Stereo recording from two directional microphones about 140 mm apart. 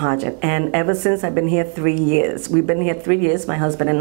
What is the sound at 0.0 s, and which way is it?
Speech, 15° right (ahead or behind).